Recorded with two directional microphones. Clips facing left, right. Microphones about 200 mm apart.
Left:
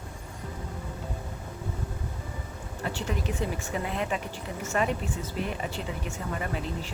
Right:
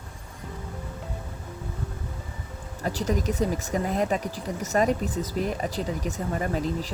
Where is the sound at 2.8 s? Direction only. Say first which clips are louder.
Right 5 dB; 40° right (ahead or behind).